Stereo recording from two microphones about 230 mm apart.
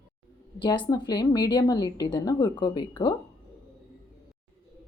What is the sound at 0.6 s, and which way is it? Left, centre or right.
A woman's voice, centre.